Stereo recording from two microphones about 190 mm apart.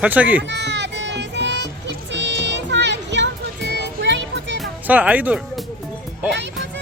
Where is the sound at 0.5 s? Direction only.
65° right (ahead or behind).